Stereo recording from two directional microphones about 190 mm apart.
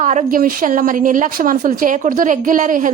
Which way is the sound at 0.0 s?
40° right (ahead or behind).